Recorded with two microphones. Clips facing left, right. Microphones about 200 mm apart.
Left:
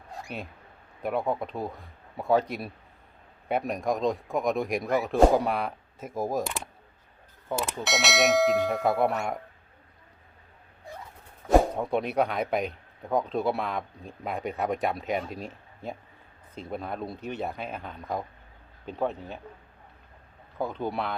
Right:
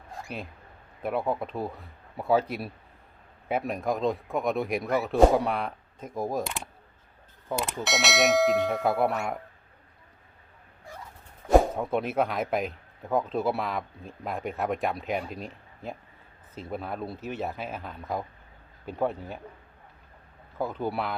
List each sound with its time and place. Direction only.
0.3 s speech: centre (ahead or behind)
11.4 s speech: centre (ahead or behind)
20.6 s speech: 5° right (ahead or behind)